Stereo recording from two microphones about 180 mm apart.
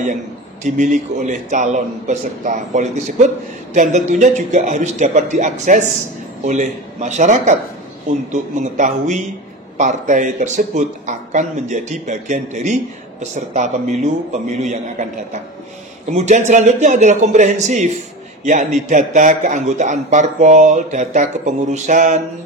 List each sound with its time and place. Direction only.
0.7 s a man's voice: 45° right (ahead or behind)
16.1 s a man's voice: 40° right (ahead or behind)